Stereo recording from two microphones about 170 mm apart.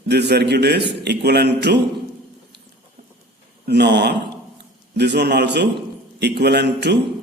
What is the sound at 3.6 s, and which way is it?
Speech, 80° right.